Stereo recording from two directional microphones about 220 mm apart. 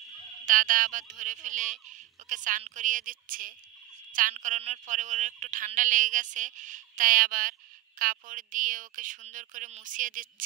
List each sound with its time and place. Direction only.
0.5 s speech: 40° right (ahead or behind)